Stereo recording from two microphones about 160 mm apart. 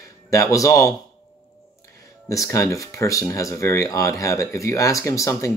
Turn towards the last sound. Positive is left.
turn(degrees=20)  # may be behind; listen again after turning